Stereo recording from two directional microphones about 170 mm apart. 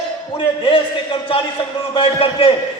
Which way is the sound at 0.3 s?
30° left (ahead or behind).